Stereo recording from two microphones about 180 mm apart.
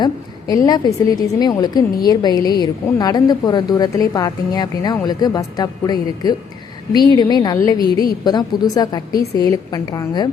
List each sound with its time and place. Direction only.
0.0 s a woman's voice: 20° left (ahead or behind)